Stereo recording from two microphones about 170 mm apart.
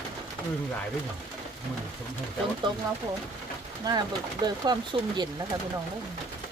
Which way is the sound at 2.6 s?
30° right (ahead or behind).